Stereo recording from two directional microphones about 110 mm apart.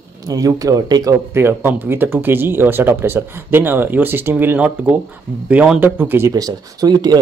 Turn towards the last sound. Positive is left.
turn(degrees=-35)  # may be behind; listen again after turning